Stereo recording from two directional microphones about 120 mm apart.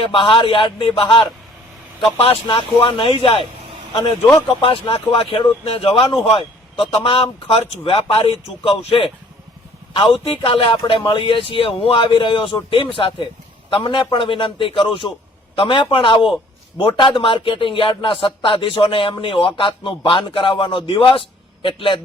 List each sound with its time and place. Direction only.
0.0 s a man's voice: 45° left (ahead or behind)
2.1 s a man's voice: 50° left (ahead or behind)
4.6 s a man's voice: 45° left (ahead or behind)